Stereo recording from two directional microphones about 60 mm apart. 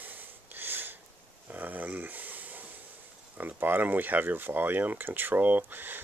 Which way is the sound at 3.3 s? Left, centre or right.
Right.